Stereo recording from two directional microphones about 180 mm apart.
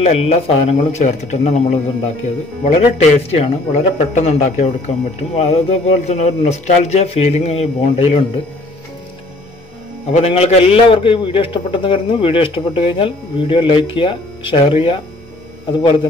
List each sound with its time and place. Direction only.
0.0 s speech: 35° left (ahead or behind)
10.1 s a man's voice: 35° left (ahead or behind)